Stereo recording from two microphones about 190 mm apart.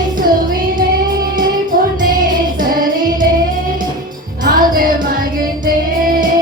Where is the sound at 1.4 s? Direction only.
45° right (ahead or behind).